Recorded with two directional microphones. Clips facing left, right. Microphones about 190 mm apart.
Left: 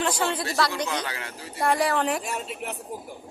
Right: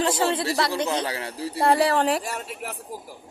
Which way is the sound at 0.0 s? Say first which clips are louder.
Right 3 dB; 30° right (ahead or behind).